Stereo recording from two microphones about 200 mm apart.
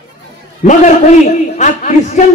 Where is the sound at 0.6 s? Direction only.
40° left (ahead or behind).